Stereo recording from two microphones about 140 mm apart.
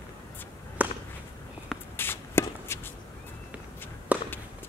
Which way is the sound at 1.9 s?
15° left (ahead or behind).